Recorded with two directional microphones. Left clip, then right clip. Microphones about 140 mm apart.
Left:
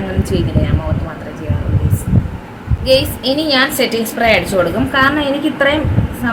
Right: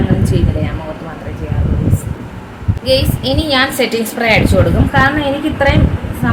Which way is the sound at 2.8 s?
10° left (ahead or behind).